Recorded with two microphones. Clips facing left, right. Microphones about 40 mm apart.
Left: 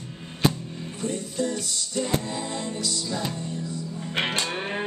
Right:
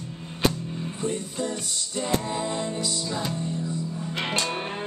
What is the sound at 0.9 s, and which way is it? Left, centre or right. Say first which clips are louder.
Music: left 2 dB; right.